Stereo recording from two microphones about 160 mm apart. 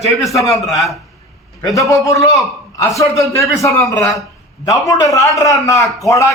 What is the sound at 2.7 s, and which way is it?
A man's voice, 20° left (ahead or behind).